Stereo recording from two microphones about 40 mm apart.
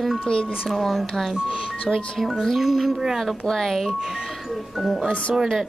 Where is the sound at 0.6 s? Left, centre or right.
Centre.